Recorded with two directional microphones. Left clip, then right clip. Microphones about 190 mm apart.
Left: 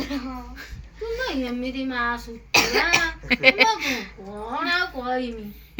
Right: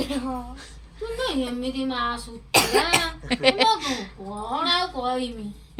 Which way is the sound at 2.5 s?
50° right (ahead or behind).